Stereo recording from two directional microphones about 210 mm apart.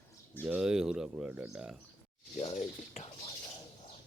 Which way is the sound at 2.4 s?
25° left (ahead or behind).